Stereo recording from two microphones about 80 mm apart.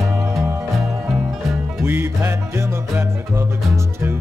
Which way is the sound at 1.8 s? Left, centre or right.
Right.